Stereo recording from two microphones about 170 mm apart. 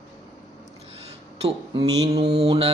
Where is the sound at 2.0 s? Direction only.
35° right (ahead or behind).